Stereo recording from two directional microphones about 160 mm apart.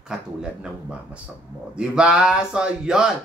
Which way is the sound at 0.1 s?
5° right (ahead or behind).